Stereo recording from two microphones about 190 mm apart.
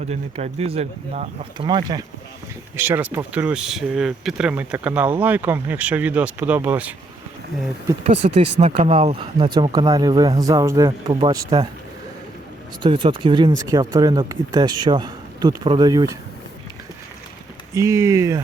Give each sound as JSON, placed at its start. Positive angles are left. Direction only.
{"t": 0.1, "sound": "speech", "side_deg": -35}
{"t": 1.5, "sound": "speech", "side_deg": -25}
{"t": 2.7, "sound": "speech", "side_deg": -10}
{"t": 8.0, "sound": "speech", "side_deg": -35}
{"t": 12.8, "sound": "speech", "side_deg": -25}
{"t": 17.7, "sound": "speech", "side_deg": -15}